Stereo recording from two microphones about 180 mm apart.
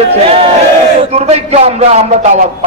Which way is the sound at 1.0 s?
35° right (ahead or behind).